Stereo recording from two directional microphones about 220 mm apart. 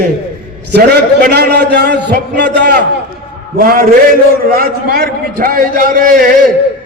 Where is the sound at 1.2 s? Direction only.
45° right (ahead or behind).